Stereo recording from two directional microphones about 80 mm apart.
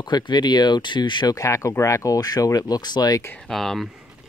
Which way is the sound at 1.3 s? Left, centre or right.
Left.